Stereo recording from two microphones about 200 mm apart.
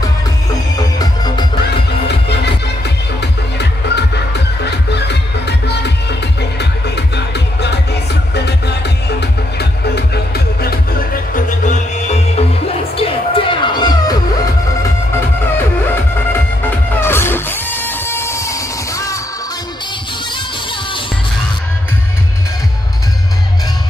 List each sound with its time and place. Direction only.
0.7 s music: 20° left (ahead or behind)
1.6 s music: 55° left (ahead or behind)
6.6 s music: 55° left (ahead or behind); by 15.6 s 10° left (ahead or behind)
16.9 s music: 10° left (ahead or behind)